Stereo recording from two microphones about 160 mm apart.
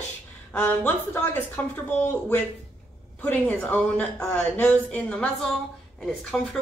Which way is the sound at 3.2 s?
10° left (ahead or behind).